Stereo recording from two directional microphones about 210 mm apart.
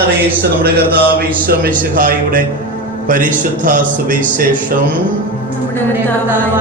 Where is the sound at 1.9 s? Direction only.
40° right (ahead or behind).